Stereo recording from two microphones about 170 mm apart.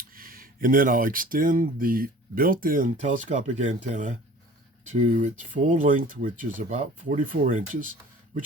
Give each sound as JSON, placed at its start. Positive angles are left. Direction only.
{"t": 0.2, "sound": "speech", "side_deg": -55}